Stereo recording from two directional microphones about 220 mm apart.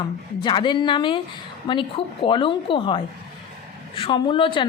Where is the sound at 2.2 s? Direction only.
20° left (ahead or behind).